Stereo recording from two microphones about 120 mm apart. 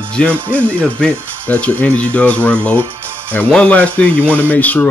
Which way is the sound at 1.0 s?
10° left (ahead or behind).